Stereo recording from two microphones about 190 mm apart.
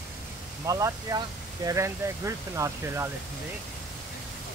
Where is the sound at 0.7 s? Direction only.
20° right (ahead or behind).